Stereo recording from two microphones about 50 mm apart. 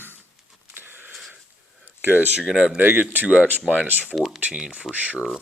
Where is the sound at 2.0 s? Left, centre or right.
Right.